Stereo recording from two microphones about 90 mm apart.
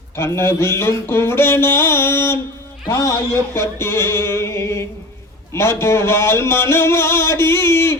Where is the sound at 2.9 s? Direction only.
35° left (ahead or behind).